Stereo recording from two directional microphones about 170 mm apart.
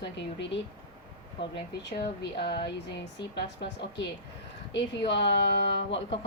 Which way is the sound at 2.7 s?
90° left.